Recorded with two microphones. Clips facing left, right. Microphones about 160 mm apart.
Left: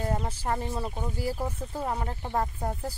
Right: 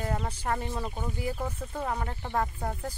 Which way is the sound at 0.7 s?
10° left (ahead or behind).